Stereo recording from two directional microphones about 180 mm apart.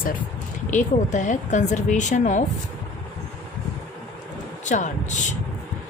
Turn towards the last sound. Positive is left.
turn(degrees=45)  # may be behind; listen again after turning